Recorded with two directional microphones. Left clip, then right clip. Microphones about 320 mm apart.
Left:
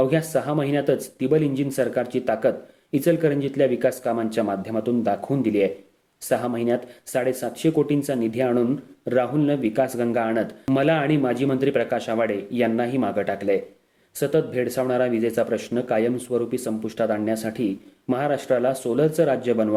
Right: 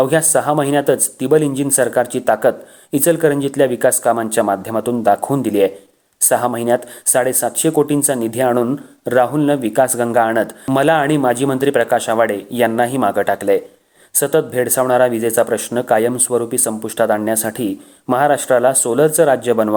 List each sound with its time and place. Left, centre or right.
0.0 s speech: centre